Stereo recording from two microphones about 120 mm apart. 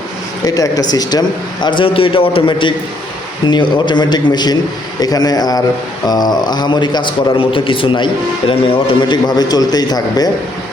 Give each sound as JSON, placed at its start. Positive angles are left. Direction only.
{"t": 0.4, "sound": "a man's voice", "side_deg": 30}
{"t": 1.6, "sound": "a man's voice", "side_deg": 45}